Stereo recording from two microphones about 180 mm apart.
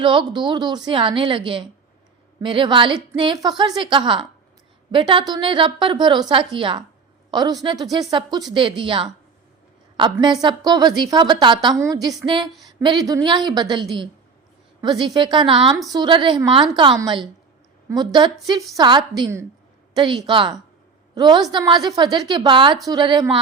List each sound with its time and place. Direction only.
0.0 s a woman's voice: 25° right (ahead or behind)